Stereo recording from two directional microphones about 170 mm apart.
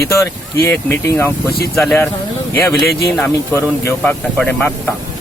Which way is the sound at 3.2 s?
15° left (ahead or behind).